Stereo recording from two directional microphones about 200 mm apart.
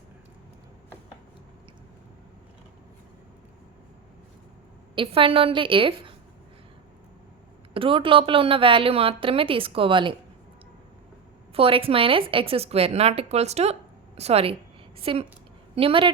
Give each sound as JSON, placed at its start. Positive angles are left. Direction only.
{"t": 4.9, "sound": "a woman's voice", "side_deg": -25}
{"t": 7.7, "sound": "a woman's voice", "side_deg": -25}
{"t": 11.5, "sound": "a woman's voice", "side_deg": -30}